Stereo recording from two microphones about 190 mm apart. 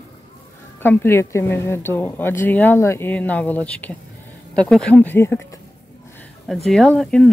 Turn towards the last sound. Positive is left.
turn(degrees=5)  # may be behind; listen again after turning